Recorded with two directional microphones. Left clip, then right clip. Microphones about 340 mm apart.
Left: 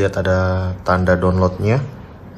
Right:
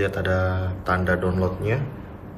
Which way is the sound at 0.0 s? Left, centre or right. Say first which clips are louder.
Left 6 dB; centre.